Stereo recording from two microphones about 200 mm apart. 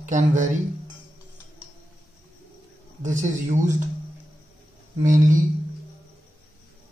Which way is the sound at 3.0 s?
40° right (ahead or behind).